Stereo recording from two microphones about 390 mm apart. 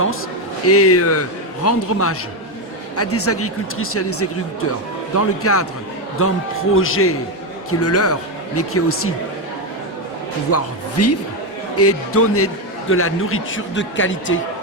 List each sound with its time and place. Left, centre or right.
0.7 s speech: left
10.5 s a man's voice: left